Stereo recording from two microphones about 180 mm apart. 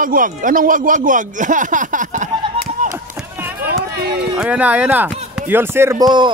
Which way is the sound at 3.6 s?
60° right (ahead or behind).